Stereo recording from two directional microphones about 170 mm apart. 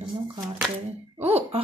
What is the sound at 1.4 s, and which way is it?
Speech, 35° right (ahead or behind).